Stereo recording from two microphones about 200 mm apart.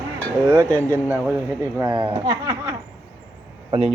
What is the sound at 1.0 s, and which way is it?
Speech, 10° right (ahead or behind).